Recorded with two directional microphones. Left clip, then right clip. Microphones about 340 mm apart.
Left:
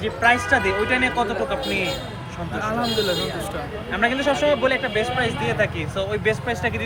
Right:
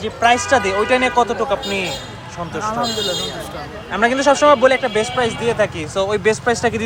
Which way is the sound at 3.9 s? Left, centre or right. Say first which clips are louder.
Right 6 dB; right.